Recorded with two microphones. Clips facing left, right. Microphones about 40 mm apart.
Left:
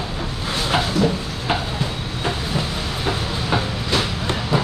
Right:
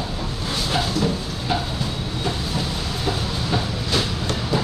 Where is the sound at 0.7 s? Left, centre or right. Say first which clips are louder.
Left 4 dB; left.